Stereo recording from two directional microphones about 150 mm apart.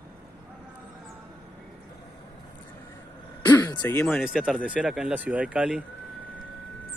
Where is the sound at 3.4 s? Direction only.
20° left (ahead or behind).